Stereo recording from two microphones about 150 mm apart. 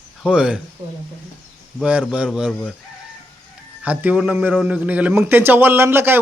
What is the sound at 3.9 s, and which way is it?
A man's voice, 10° right (ahead or behind).